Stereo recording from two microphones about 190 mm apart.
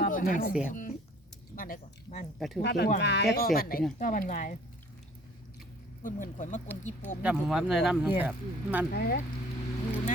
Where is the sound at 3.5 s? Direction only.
50° left (ahead or behind).